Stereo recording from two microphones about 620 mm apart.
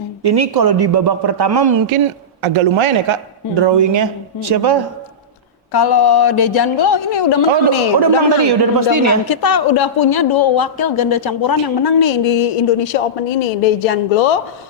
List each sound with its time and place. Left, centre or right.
0.2 s a man's voice: right
2.0 s a man's voice: right
5.7 s speech: left
7.9 s a man's voice: right
9.2 s a woman's voice: left